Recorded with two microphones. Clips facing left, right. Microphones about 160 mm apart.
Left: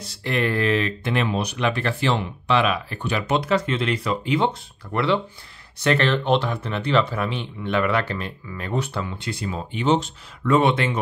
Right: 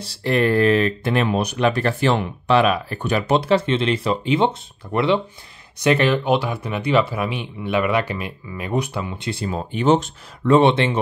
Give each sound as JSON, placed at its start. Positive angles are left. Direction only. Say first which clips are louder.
{"t": 0.0, "sound": "speech", "louder": "right 5 dB", "side_deg": -35}
{"t": 9.4, "sound": "speech", "louder": "right 5 dB", "side_deg": -40}
{"t": 10.4, "sound": "speech", "louder": "right 4 dB", "side_deg": -30}